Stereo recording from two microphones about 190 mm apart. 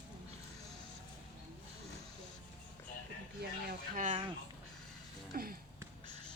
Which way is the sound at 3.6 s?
40° right (ahead or behind).